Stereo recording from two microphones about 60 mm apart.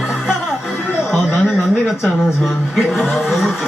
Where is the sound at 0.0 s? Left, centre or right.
Centre.